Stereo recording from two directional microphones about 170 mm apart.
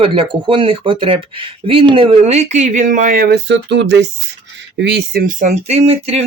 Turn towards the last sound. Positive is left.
turn(degrees=-35)  # may be behind; listen again after turning